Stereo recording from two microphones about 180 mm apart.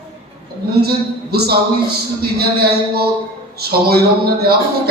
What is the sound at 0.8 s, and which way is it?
Speech, 60° right (ahead or behind).